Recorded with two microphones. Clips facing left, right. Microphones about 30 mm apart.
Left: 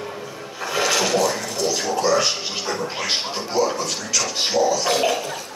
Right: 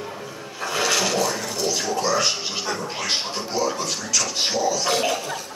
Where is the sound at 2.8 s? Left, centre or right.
Centre.